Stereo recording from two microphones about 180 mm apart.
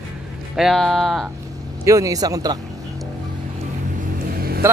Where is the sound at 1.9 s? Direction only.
20° right (ahead or behind).